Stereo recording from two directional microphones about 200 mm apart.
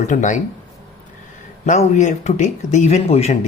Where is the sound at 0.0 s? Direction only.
40° left (ahead or behind).